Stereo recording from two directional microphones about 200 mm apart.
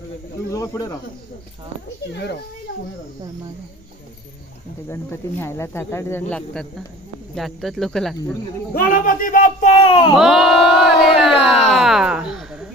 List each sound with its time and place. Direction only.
0.5 s snake: 15° left (ahead or behind)
4.8 s speech: 10° left (ahead or behind)
6.3 s crowd: 5° left (ahead or behind)
8.7 s speech: 45° left (ahead or behind)
10.1 s crowd: centre (ahead or behind)
11.3 s speech: 30° left (ahead or behind)
11.7 s a sound: centre (ahead or behind)